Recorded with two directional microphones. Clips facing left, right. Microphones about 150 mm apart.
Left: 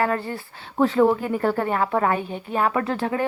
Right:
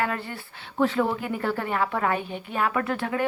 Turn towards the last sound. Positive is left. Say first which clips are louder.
# left 3 dB
turn(degrees=30)  # may be behind; listen again after turning